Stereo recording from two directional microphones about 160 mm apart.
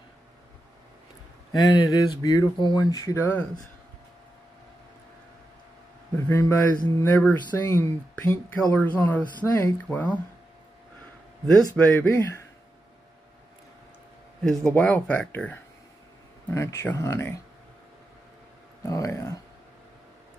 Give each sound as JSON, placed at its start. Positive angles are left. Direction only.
{"t": 1.5, "sound": "speech", "side_deg": 25}
{"t": 6.2, "sound": "speech", "side_deg": 10}
{"t": 11.7, "sound": "speech", "side_deg": 10}
{"t": 14.4, "sound": "speech", "side_deg": 5}
{"t": 18.9, "sound": "speech", "side_deg": 20}